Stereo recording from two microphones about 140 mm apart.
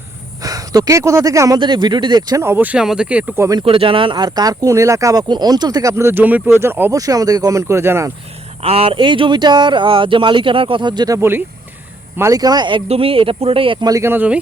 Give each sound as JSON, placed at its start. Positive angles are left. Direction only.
{"t": 0.4, "sound": "speech", "side_deg": -25}
{"t": 3.6, "sound": "speech", "side_deg": -40}
{"t": 7.0, "sound": "speech", "side_deg": -25}
{"t": 8.6, "sound": "speech", "side_deg": -45}
{"t": 11.2, "sound": "speech", "side_deg": -15}
{"t": 13.8, "sound": "speech", "side_deg": -20}